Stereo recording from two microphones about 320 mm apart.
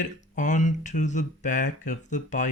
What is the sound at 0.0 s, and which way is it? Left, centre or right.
Speech, left.